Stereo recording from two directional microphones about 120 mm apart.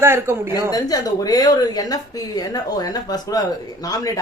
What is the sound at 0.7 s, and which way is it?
A woman's voice, 30° left (ahead or behind).